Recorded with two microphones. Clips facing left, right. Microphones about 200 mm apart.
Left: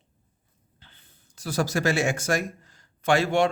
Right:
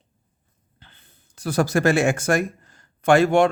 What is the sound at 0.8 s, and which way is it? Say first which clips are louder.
Speech: right 3 dB; 55° right (ahead or behind).